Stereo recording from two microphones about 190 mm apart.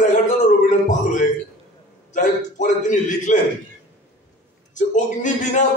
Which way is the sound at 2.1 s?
40° left (ahead or behind).